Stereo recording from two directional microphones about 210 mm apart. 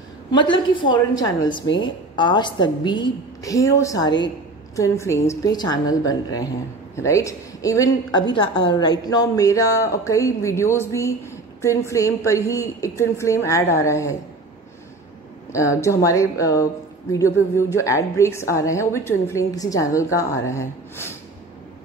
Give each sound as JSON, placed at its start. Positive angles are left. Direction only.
{"t": 0.3, "sound": "a woman's voice", "side_deg": 20}
{"t": 15.5, "sound": "a woman's voice", "side_deg": 15}